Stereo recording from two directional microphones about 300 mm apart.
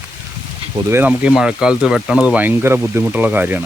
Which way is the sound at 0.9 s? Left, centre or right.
Centre.